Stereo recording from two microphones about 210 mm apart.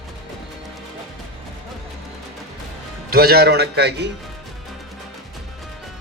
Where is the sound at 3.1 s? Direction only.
45° right (ahead or behind).